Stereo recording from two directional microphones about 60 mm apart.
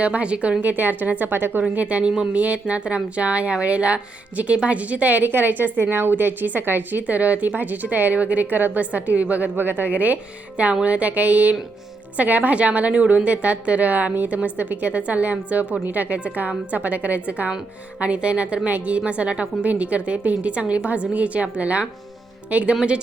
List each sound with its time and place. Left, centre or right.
0.0 s a woman's voice: right
1.7 s a woman's voice: right